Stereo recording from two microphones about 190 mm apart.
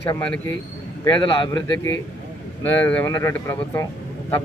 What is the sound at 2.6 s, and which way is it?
Speech, 10° left (ahead or behind).